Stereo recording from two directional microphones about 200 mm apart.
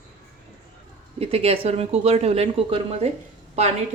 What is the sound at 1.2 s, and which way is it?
Speech, 30° right (ahead or behind).